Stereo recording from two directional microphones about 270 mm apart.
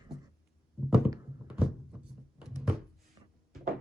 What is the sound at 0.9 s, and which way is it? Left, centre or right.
Thunk, centre.